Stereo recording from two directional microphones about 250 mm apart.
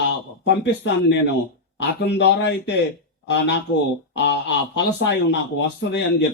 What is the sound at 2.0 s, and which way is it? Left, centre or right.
Speech, left.